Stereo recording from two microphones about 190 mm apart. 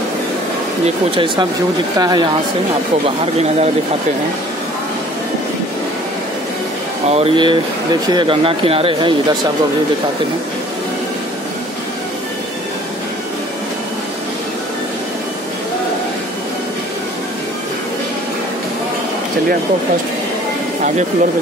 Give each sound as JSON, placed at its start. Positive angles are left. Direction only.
{"t": 1.1, "sound": "speech", "side_deg": -25}
{"t": 7.1, "sound": "speech", "side_deg": -30}